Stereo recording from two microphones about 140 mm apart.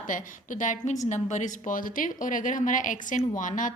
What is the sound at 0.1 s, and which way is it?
A woman's voice, 65° left (ahead or behind).